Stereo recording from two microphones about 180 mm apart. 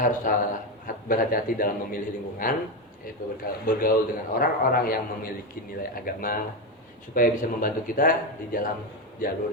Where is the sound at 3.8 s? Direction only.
55° left (ahead or behind).